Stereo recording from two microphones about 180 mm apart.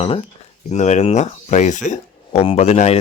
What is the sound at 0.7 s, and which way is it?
Speech, 40° left (ahead or behind).